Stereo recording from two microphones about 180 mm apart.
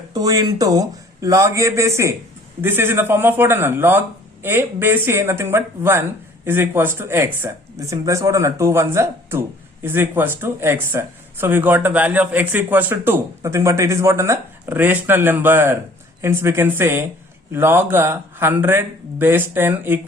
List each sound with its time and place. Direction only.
0.1 s speech: 20° right (ahead or behind)